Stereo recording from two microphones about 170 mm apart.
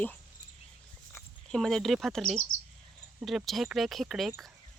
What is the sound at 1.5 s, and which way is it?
Speech, centre (ahead or behind).